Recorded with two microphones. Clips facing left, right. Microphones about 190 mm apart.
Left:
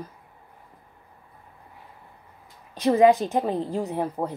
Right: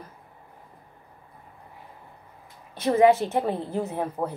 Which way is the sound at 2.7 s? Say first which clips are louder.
Left 1 dB; 15° left (ahead or behind).